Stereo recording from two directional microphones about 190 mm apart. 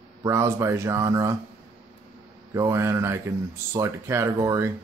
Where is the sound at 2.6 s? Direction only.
15° right (ahead or behind).